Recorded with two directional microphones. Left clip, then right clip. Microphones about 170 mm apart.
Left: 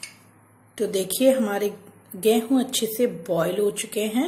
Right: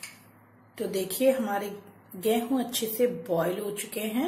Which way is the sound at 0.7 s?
30° left (ahead or behind).